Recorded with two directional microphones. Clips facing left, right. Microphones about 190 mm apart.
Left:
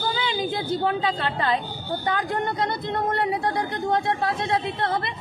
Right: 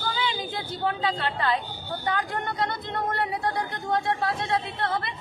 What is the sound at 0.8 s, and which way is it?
A woman's voice, 20° left (ahead or behind).